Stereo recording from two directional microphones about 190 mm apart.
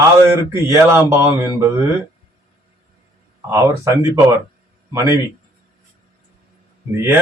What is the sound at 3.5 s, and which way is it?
Speech, 15° right (ahead or behind).